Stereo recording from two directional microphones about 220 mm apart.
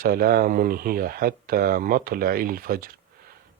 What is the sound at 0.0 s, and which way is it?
Speech, 40° right (ahead or behind).